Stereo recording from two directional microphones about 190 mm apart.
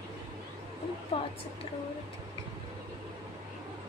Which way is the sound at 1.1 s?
25° left (ahead or behind).